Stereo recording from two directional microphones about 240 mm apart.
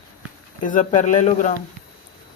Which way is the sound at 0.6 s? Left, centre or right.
Left.